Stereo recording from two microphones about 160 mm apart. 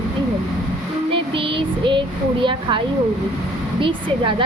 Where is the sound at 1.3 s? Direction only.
35° right (ahead or behind).